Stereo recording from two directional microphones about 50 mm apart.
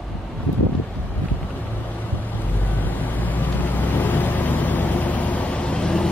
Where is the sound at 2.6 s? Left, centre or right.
Left; by 6.0 s centre.